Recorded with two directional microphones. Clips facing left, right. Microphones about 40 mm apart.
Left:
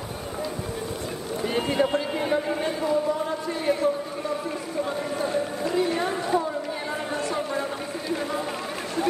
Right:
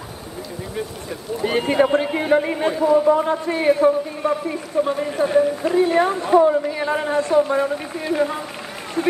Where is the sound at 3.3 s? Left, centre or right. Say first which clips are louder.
Right 7 dB; right.